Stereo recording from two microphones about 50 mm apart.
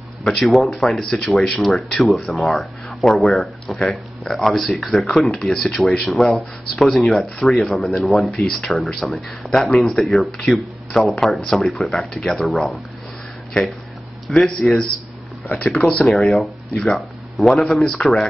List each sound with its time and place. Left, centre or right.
0.2 s speech: centre
1.6 s speech: centre
12.1 s speech: centre
14.3 s speech: centre
15.8 s speech: left
16.1 s speech: centre
17.8 s speech: centre